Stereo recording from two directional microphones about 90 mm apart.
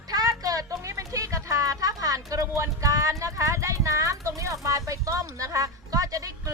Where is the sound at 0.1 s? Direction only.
45° right (ahead or behind).